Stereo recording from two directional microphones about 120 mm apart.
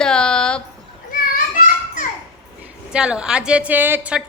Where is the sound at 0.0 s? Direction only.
5° left (ahead or behind).